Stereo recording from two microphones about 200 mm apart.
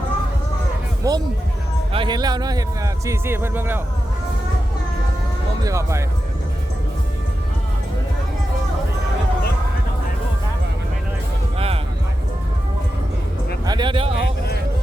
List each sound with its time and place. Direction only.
1.0 s music: 15° right (ahead or behind)
1.9 s speech: 25° right (ahead or behind)
5.6 s speech: 15° right (ahead or behind)
11.5 s music: 30° right (ahead or behind)
13.7 s speech: 20° right (ahead or behind)